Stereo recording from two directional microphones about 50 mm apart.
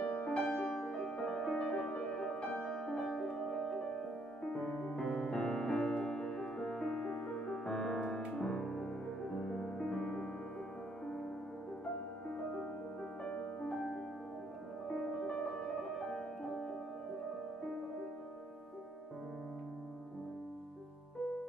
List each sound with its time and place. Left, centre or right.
0.3 s music: centre
3.6 s music: centre
4.5 s music: centre
13.2 s music: left
13.7 s music: centre